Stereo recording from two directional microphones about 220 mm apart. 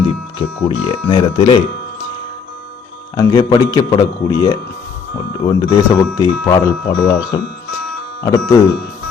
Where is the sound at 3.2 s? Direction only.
15° left (ahead or behind).